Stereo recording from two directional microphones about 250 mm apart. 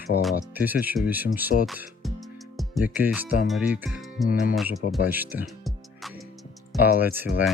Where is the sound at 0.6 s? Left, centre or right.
Centre.